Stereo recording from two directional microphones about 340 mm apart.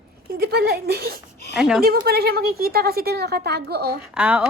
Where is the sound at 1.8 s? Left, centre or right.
Right.